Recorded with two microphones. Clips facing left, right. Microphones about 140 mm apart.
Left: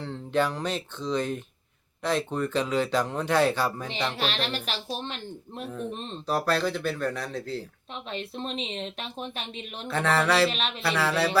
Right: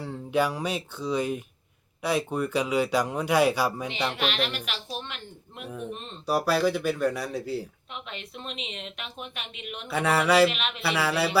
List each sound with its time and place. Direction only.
0.0 s speech: 10° right (ahead or behind)
4.2 s speech: 35° left (ahead or behind)
6.2 s speech: 10° right (ahead or behind)
8.1 s speech: 35° left (ahead or behind)
9.8 s speech: 10° right (ahead or behind)
10.5 s speech: 35° left (ahead or behind)
10.8 s speech: 5° right (ahead or behind)